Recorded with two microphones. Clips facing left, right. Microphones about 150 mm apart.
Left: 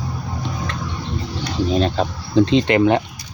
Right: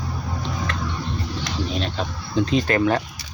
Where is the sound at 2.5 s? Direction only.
25° left (ahead or behind).